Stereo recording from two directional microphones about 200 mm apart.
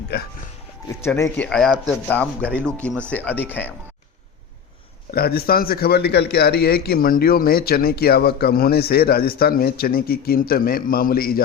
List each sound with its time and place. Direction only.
0.1 s speech: 55° left (ahead or behind)
0.9 s speech: 15° left (ahead or behind)
5.1 s speech: 50° left (ahead or behind)